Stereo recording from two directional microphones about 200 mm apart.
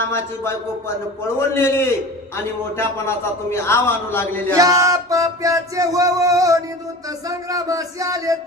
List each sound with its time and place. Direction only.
0.0 s a man's voice: 10° left (ahead or behind)
4.5 s music: 15° right (ahead or behind)